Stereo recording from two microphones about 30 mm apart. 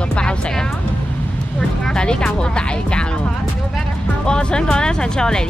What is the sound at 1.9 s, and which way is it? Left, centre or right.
Speech, left.